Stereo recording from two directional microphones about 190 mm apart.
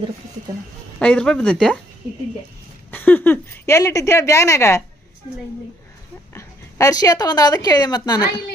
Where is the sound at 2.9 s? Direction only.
10° left (ahead or behind).